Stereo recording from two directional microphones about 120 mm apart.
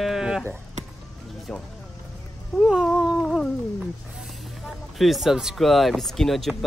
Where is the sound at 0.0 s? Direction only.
5° right (ahead or behind).